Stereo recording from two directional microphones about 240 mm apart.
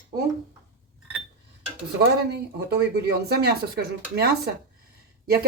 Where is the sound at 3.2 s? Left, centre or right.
Right.